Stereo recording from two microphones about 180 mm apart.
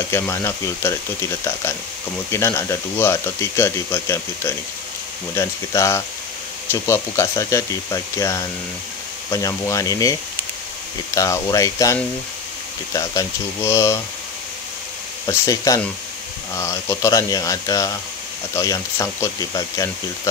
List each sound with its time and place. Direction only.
0.1 s speech: 15° left (ahead or behind)
11.1 s speech: 15° left (ahead or behind)
15.2 s speech: 20° left (ahead or behind)